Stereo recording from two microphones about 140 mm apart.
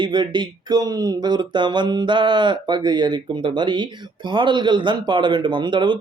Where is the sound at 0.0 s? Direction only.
35° right (ahead or behind).